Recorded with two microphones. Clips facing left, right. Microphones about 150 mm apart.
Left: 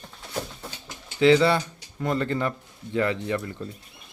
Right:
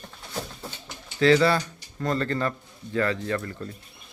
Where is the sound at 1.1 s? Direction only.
15° left (ahead or behind).